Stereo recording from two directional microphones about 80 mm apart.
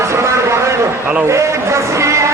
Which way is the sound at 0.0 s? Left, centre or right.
Right.